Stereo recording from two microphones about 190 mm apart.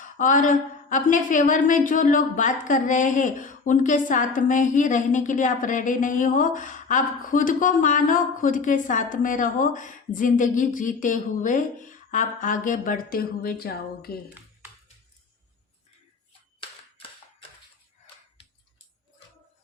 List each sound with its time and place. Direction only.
0.0 s a woman's voice: 45° left (ahead or behind)